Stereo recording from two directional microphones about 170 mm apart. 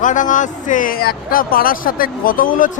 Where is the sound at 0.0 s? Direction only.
50° left (ahead or behind).